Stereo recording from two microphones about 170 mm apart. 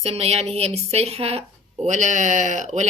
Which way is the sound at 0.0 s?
35° right (ahead or behind).